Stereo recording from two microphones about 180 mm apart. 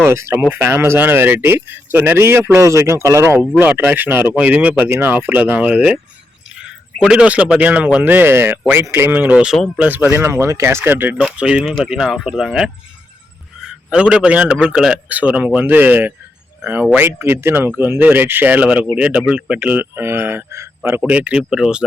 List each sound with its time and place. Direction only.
0.0 s speech: 15° right (ahead or behind)